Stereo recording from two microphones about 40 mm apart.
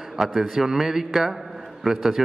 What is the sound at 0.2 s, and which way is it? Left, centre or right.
A man's voice, centre.